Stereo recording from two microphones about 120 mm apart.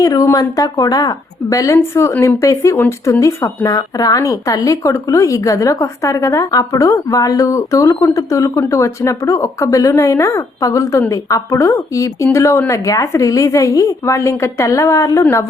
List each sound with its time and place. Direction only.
0.0 s speech: 30° left (ahead or behind)